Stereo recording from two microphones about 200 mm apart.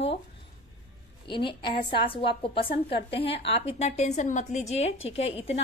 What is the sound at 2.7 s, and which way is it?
Speech, 55° left (ahead or behind).